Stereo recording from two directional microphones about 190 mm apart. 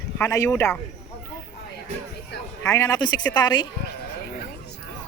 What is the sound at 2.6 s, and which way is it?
Speech, 15° left (ahead or behind).